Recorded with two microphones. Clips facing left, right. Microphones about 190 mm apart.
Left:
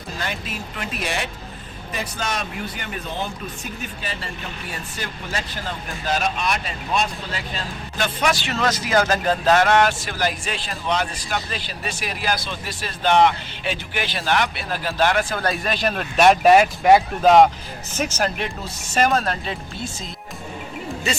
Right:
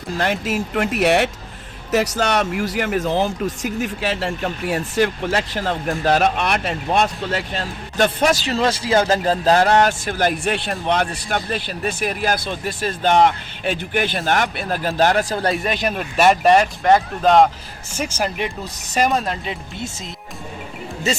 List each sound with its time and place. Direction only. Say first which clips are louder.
0.2 s speech: right 10 dB; 80° right
0.8 s speech: right 11 dB; 70° right (ahead or behind)
1.9 s speech: right 10 dB; 80° right
4.7 s speech: right 17 dB; 80° right; by 8.1 s 60° right (ahead or behind)
8.2 s speech: right 4 dB; 40° right (ahead or behind)
15.4 s speech: right 2 dB; 20° right (ahead or behind); by 17.5 s centre (ahead or behind)
17.9 s speech: even; 10° right (ahead or behind)
18.9 s speech: right 1 dB; 15° right (ahead or behind)